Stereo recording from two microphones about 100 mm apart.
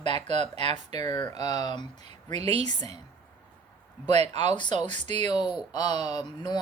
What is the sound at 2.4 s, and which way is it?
Speech, 90° right.